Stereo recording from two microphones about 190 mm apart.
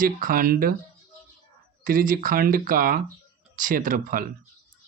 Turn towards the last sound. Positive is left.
turn(degrees=-45)  # may be behind; listen again after turning